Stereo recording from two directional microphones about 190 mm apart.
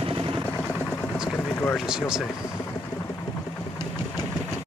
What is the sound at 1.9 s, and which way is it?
Speech, 5° right (ahead or behind).